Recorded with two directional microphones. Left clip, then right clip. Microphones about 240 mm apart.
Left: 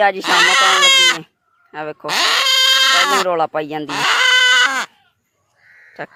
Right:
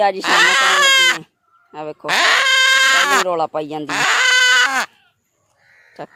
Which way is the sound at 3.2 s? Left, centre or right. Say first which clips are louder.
Left 2 dB; centre.